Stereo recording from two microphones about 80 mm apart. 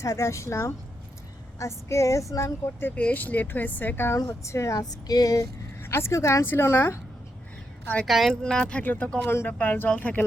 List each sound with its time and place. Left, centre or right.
0.0 s a woman's voice: left
2.8 s speech: centre
4.4 s speech: left
5.8 s a woman's voice: left
8.0 s a woman's voice: centre; by 9.5 s left
9.5 s speech: left